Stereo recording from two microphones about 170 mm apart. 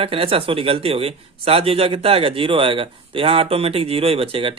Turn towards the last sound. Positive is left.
turn(degrees=-30)  # may be behind; listen again after turning